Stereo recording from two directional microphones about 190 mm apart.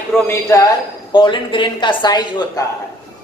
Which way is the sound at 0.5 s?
20° left (ahead or behind).